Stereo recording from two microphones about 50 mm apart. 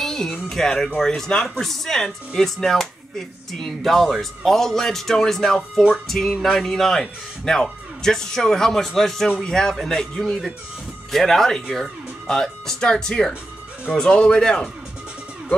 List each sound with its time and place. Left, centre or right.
0.0 s music: centre
0.5 s speech: centre